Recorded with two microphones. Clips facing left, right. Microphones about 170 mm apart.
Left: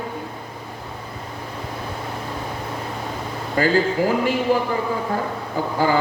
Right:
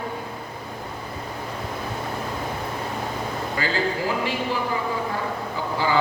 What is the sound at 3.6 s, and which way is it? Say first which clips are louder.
A man's voice: left 8 dB; 45° left (ahead or behind).